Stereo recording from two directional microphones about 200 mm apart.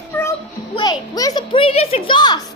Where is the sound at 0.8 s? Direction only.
20° left (ahead or behind).